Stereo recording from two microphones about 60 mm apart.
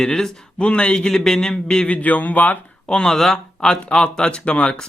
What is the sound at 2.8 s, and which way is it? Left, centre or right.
Speech, centre.